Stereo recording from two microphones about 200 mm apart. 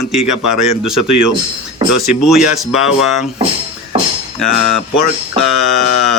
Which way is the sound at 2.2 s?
Centre (ahead or behind).